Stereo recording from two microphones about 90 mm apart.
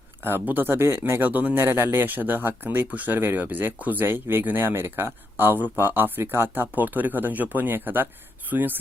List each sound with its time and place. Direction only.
0.3 s speech: 25° right (ahead or behind)